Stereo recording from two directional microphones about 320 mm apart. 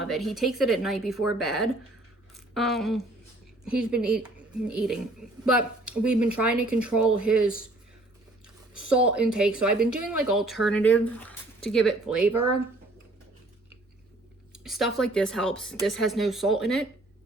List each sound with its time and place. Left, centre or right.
0.0 s speech: centre
5.5 s speech: centre
6.3 s speech: right
6.7 s speech: centre
8.9 s speech: centre
9.8 s speech: right
10.2 s speech: centre
14.5 s speech: centre